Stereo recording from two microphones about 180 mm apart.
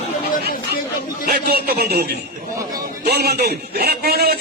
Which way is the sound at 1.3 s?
60° right (ahead or behind).